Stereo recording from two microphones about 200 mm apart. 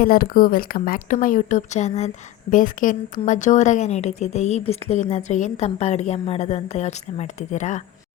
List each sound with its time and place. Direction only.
0.0 s a woman's voice: 45° left (ahead or behind)